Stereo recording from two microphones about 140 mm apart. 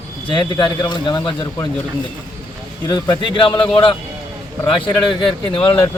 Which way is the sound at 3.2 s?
35° left (ahead or behind).